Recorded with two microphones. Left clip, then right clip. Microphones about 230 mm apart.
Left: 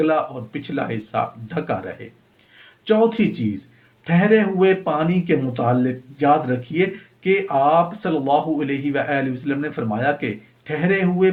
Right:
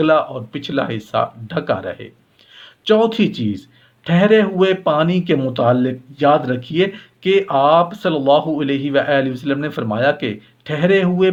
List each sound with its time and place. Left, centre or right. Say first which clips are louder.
0.0 s speech: right 5 dB; right
2.8 s speech: right 3 dB; right